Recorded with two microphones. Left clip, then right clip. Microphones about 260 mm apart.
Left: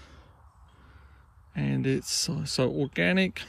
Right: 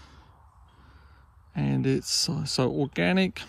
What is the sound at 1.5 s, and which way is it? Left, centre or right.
Speech, centre.